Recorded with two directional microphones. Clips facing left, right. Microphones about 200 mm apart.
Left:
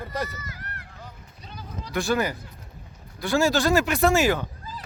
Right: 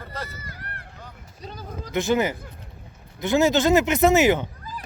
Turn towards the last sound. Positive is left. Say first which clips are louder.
# right 3 dB
turn(degrees=-20)  # may be behind; listen again after turning